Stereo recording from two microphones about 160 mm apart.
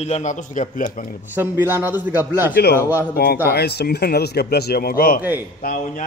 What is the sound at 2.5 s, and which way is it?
Speech, 70° left (ahead or behind).